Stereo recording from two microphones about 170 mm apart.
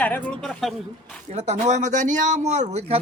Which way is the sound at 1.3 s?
40° right (ahead or behind).